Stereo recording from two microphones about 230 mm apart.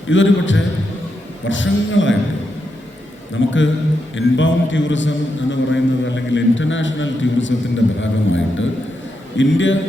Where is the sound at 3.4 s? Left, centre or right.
Left.